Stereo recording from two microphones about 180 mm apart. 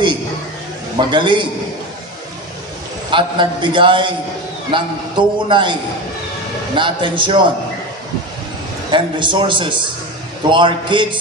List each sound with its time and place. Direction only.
0.9 s a man's voice: 25° right (ahead or behind)
3.1 s a man's voice: 25° right (ahead or behind)
8.9 s a man's voice: 25° right (ahead or behind)